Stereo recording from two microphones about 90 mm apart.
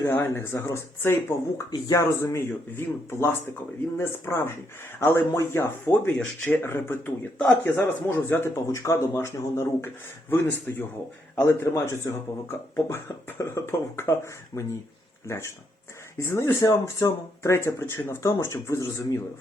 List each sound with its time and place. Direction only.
0.0 s speech: 30° left (ahead or behind)
7.3 s speech: 10° left (ahead or behind)
7.6 s speech: 25° left (ahead or behind)
8.4 s speech: 35° left (ahead or behind)
16.1 s speech: 30° left (ahead or behind)